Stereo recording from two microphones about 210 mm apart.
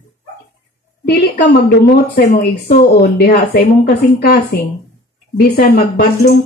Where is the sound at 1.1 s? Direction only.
50° left (ahead or behind).